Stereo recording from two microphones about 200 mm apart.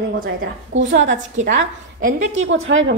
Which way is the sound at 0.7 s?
70° right (ahead or behind).